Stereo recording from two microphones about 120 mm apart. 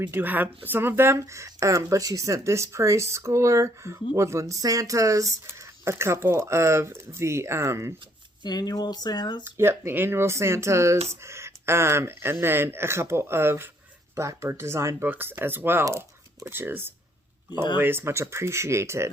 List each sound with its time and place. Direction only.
0.0 s speech: 15° right (ahead or behind)
8.4 s speech: 35° left (ahead or behind)
9.4 s speech: 20° right (ahead or behind)